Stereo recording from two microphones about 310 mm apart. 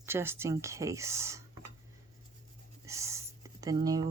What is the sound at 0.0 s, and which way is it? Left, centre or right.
Speech, centre.